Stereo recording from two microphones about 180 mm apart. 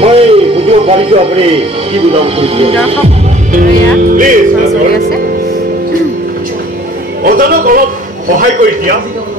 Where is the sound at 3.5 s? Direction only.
45° right (ahead or behind).